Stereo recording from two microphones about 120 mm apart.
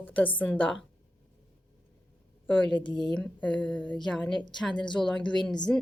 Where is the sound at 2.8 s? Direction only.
40° left (ahead or behind).